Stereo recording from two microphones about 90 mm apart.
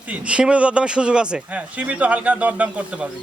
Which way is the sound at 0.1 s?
10° right (ahead or behind).